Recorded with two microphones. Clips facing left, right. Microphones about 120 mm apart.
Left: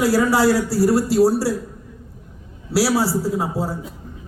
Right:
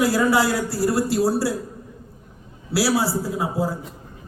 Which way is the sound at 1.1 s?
20° left (ahead or behind).